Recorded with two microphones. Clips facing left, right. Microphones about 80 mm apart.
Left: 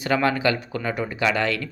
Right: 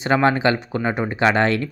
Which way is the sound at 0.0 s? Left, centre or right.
Right.